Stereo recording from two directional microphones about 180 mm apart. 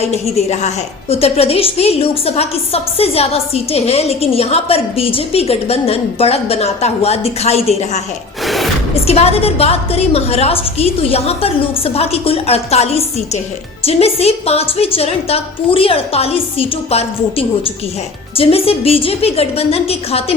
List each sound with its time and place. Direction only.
0.3 s a woman's voice: 35° left (ahead or behind)
8.4 s a sound: centre (ahead or behind)
9.0 s a woman's voice: 35° left (ahead or behind)